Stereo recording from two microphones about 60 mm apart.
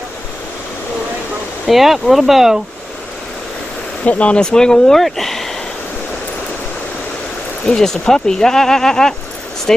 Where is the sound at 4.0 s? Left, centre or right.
Left; by 5.5 s centre.